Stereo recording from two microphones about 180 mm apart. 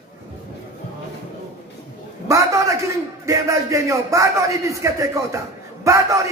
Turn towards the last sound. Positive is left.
turn(degrees=-15)  # may be behind; listen again after turning